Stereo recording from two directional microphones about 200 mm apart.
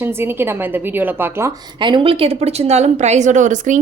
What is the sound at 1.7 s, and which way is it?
A woman's voice, 25° right (ahead or behind).